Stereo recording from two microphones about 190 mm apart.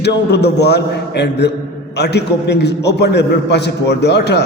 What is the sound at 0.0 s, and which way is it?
A man's voice, 60° left (ahead or behind).